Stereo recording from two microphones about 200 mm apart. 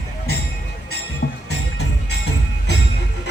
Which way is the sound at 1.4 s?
55° left (ahead or behind).